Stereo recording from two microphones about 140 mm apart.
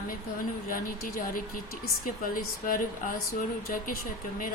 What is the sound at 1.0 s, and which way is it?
Speech, 85° left.